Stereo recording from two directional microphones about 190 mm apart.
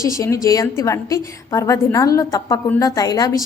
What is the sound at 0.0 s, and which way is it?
A woman's voice, 15° left (ahead or behind).